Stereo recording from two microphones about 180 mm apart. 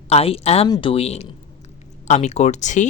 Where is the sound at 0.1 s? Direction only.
35° left (ahead or behind).